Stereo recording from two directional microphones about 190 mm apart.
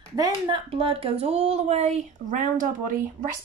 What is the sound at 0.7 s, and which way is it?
Speech, 30° right (ahead or behind).